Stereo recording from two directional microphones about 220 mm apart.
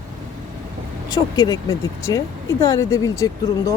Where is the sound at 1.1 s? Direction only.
15° left (ahead or behind).